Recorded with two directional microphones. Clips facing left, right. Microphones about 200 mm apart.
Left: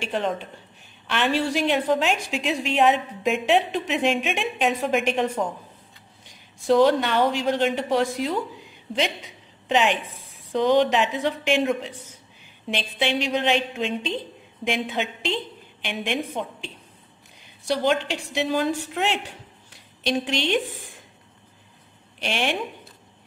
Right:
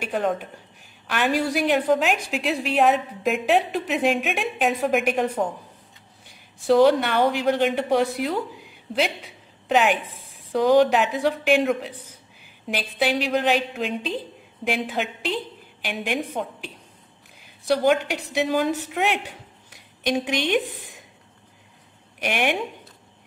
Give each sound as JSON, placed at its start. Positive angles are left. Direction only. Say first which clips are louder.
{"t": 0.0, "sound": "a woman's voice", "louder": "right 2 dB", "side_deg": -5}
{"t": 6.7, "sound": "a woman's voice", "louder": "right 1 dB", "side_deg": -10}
{"t": 22.2, "sound": "a woman's voice", "louder": "right 2 dB", "side_deg": -10}